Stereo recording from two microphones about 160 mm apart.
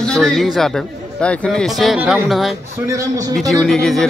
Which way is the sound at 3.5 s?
Centre (ahead or behind).